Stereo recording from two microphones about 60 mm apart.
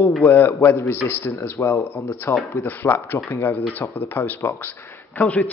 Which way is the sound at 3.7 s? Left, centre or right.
Left.